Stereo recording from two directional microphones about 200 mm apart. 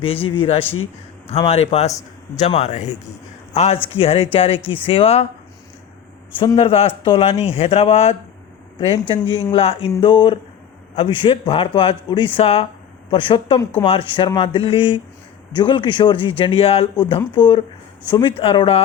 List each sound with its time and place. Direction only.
0.0 s a man's voice: 25° left (ahead or behind)
6.4 s speech: 25° left (ahead or behind)